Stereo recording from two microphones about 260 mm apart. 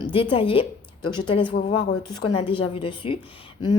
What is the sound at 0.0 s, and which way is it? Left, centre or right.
A woman's voice, centre.